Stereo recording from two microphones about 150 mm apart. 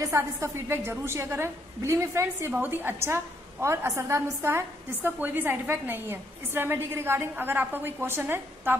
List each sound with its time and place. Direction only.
0.0 s a woman's voice: 20° right (ahead or behind)